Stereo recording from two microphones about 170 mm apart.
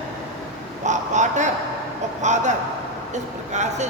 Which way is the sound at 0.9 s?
45° right (ahead or behind).